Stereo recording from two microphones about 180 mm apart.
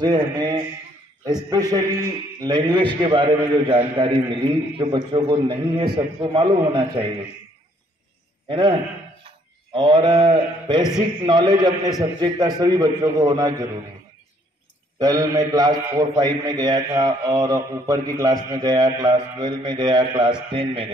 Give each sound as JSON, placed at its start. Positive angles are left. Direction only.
{"t": 0.0, "sound": "a man's voice", "side_deg": -25}
{"t": 8.5, "sound": "a man's voice", "side_deg": -25}
{"t": 15.0, "sound": "a man's voice", "side_deg": -20}